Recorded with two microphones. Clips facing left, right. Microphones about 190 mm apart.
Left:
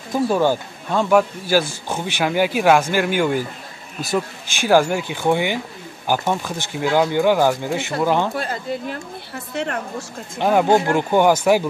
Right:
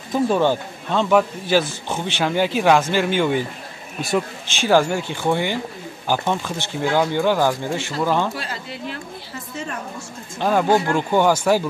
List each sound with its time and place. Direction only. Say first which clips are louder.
0.3 s a man's voice: left 2 dB; 10° left (ahead or behind)
4.6 s a man's voice: left 1 dB; 10° left (ahead or behind)
8.4 s a woman's voice: left 6 dB; 45° left (ahead or behind)
9.5 s a woman's voice: left 6 dB; 70° left (ahead or behind)
10.4 s a man's voice: left 2 dB; 15° left (ahead or behind)